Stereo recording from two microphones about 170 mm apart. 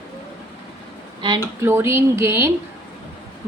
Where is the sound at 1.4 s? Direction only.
15° right (ahead or behind).